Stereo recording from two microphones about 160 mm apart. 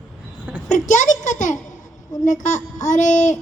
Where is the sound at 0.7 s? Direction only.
50° left (ahead or behind).